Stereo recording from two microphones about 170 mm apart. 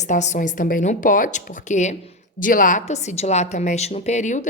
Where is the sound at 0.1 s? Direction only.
45° left (ahead or behind).